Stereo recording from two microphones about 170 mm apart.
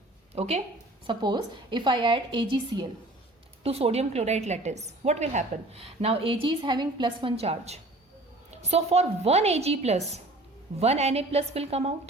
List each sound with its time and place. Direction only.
0.3 s speech: 40° right (ahead or behind)
1.0 s a woman's voice: 25° right (ahead or behind)